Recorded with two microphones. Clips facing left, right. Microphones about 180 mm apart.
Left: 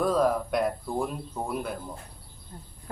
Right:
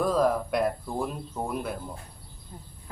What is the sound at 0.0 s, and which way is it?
Speech, centre (ahead or behind).